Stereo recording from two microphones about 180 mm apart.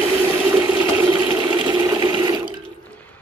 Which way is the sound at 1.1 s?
25° right (ahead or behind).